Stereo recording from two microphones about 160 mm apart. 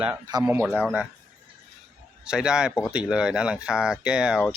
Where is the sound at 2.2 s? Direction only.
5° right (ahead or behind).